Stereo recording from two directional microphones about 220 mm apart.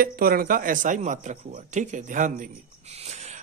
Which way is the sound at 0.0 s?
40° right (ahead or behind).